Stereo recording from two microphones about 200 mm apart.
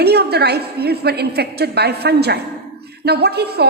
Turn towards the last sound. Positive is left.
turn(degrees=-55)  # may be behind; listen again after turning